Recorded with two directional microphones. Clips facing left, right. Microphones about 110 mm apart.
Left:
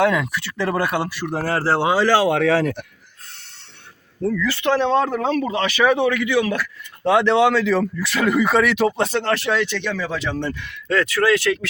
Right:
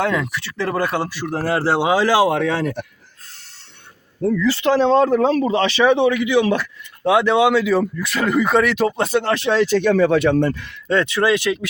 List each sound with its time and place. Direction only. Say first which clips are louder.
0.0 s speech: left 2 dB; centre (ahead or behind)
1.5 s speech: right 1 dB; 10° right (ahead or behind)
4.3 s speech: right 3 dB; 25° right (ahead or behind)
7.0 s speech: right 1 dB; 5° right (ahead or behind)
9.3 s speech: right 2 dB; 20° right (ahead or behind)
9.6 s speech: right 8 dB; 40° right (ahead or behind)
10.8 s speech: right 1 dB; 25° right (ahead or behind)